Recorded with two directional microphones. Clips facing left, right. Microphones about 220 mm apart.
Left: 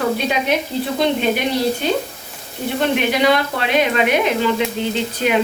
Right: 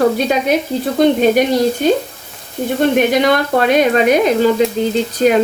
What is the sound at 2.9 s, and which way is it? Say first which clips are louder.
Speech: right 2 dB; 45° right (ahead or behind).